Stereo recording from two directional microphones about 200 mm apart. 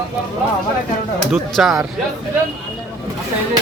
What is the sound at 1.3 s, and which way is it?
Speech, centre (ahead or behind).